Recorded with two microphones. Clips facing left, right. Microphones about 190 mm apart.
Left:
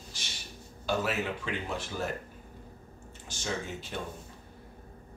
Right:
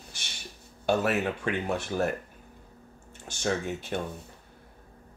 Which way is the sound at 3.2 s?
55° right (ahead or behind).